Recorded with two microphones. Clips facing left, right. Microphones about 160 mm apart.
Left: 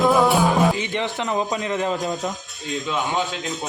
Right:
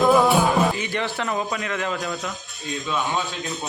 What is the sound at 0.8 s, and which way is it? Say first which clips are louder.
A man's voice: left 1 dB; 20° left (ahead or behind).